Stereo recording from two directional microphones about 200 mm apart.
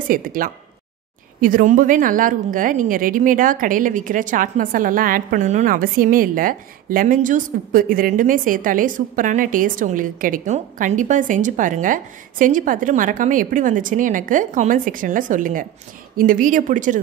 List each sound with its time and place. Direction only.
0.1 s a woman's voice: 45° right (ahead or behind)